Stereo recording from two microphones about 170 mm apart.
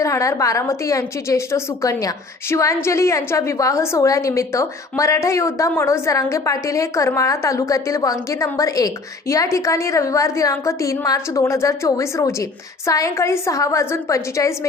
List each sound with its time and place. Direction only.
0.0 s a woman's voice: 20° left (ahead or behind)